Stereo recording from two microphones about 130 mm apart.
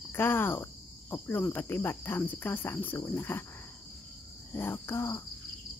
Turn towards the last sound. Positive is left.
turn(degrees=20)  # may be behind; listen again after turning